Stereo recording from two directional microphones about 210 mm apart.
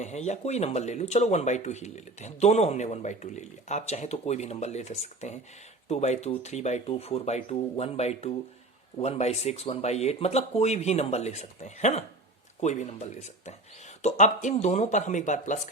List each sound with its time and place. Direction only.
0.0 s speech: 35° left (ahead or behind)